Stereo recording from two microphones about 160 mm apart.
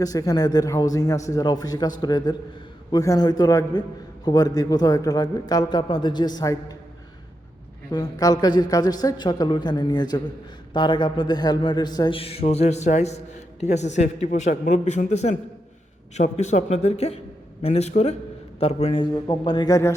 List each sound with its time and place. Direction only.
0.0 s a man's voice: 20° left (ahead or behind)
7.9 s a man's voice: 25° left (ahead or behind)